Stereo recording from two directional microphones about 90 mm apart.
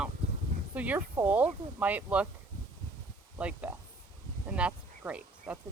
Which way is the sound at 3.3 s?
15° right (ahead or behind).